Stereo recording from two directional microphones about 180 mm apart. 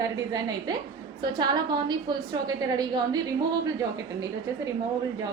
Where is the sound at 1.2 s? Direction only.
25° right (ahead or behind).